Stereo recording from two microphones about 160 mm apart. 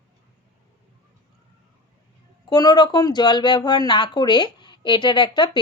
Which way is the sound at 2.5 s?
25° left (ahead or behind).